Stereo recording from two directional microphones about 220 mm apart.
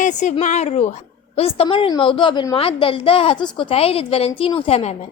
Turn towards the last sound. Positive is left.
turn(degrees=30)  # may be behind; listen again after turning